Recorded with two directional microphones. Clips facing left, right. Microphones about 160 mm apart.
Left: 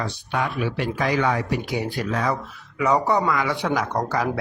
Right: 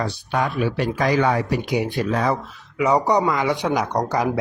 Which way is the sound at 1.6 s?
20° right (ahead or behind).